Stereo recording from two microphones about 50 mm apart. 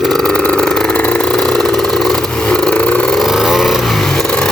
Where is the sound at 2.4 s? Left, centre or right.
Centre.